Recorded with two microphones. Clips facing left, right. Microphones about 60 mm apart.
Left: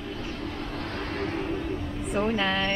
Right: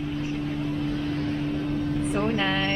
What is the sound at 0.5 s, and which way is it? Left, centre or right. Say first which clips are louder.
Vehicle: right 5 dB; left.